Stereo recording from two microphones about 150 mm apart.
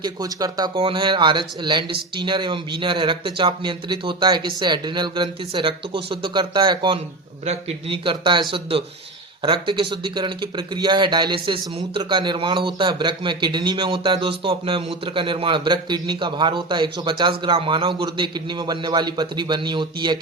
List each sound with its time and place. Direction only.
0.0 s speech: 25° right (ahead or behind)